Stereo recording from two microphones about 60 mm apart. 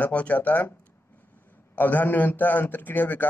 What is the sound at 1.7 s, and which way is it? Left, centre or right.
A man's voice, left.